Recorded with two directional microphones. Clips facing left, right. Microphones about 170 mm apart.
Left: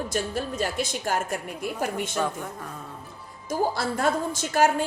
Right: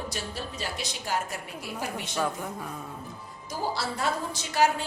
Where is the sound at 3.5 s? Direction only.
50° left (ahead or behind).